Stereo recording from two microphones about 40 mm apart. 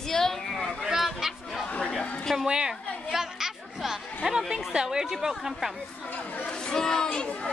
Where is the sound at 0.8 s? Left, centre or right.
Centre.